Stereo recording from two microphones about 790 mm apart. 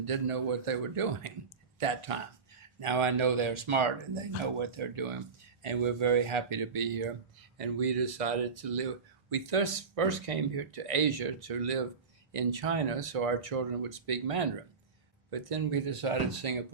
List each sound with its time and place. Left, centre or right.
0.0 s speech: right
6.8 s speech: right
9.3 s speech: right